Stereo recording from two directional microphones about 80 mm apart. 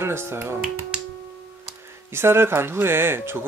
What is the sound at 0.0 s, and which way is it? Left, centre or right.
Speech, right.